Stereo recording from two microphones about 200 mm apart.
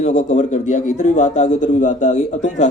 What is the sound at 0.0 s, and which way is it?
A man's voice, 35° left (ahead or behind).